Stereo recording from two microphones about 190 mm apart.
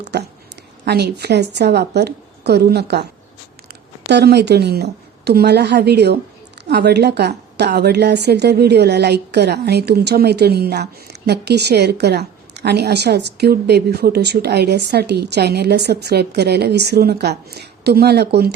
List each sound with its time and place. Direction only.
0.1 s a woman's voice: 60° right (ahead or behind)
4.1 s a woman's voice: 60° right (ahead or behind)